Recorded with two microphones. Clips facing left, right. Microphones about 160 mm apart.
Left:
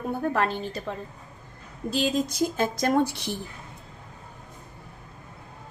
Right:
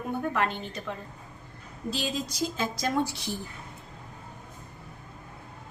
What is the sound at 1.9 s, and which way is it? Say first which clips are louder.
A woman's voice: left 6 dB; 50° left (ahead or behind).